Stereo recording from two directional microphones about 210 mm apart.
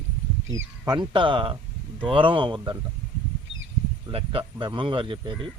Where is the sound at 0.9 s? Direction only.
25° right (ahead or behind).